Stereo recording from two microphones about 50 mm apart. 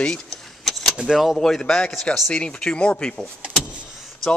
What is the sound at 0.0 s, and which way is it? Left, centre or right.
Speech, centre.